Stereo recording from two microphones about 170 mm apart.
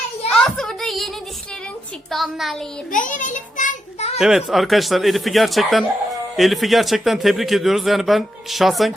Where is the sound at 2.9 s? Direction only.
50° left (ahead or behind).